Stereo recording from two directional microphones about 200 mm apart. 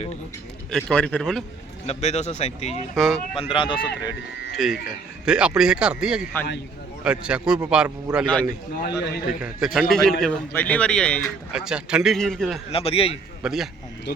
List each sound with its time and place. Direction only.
0.7 s speech: 5° left (ahead or behind)
1.9 s speech: 35° left (ahead or behind)
2.9 s speech: centre (ahead or behind)
3.3 s speech: 25° left (ahead or behind)
4.6 s speech: centre (ahead or behind)
8.8 s a man's voice: 55° left (ahead or behind)
9.4 s speech: centre (ahead or behind)
12.7 s speech: 30° left (ahead or behind)
13.4 s speech: centre (ahead or behind)